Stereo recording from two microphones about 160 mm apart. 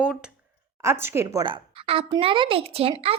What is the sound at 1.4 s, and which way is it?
A woman's voice, 35° right (ahead or behind).